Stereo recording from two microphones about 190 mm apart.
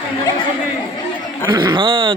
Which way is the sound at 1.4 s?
25° right (ahead or behind).